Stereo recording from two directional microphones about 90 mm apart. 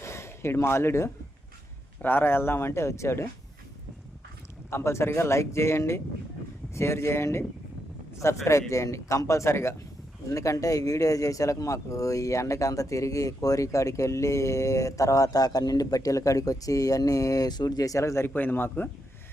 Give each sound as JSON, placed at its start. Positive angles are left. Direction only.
{"t": 0.0, "sound": "a sound", "side_deg": 30}
{"t": 2.0, "sound": "speech", "side_deg": 20}
{"t": 4.7, "sound": "speech", "side_deg": 30}
{"t": 18.3, "sound": "speech", "side_deg": 20}